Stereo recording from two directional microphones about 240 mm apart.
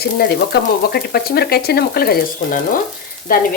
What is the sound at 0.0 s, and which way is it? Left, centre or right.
Speech, left.